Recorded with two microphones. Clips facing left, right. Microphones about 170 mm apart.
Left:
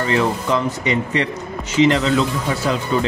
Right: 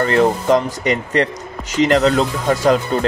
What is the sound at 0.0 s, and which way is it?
Speech, 50° right (ahead or behind).